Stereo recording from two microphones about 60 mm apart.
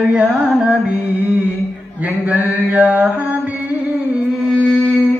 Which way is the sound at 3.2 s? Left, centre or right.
Right.